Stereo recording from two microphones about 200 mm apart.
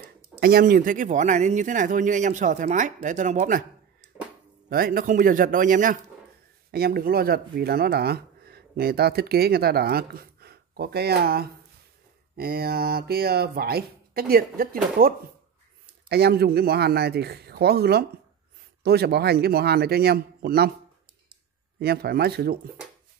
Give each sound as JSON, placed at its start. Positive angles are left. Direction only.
{"t": 0.0, "sound": "speech", "side_deg": -50}
{"t": 4.6, "sound": "speech", "side_deg": -45}
{"t": 21.7, "sound": "speech", "side_deg": -50}